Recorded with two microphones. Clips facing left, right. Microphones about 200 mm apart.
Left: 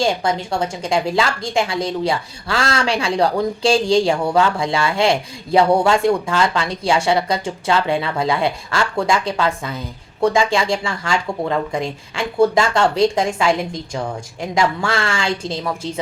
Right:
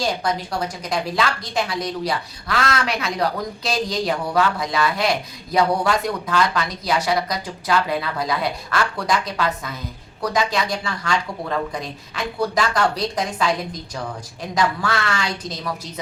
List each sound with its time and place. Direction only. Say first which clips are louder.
0.0 s a woman's voice: left 4 dB; 25° left (ahead or behind)